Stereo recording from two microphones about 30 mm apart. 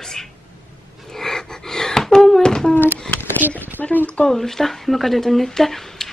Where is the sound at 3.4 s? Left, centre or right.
Right.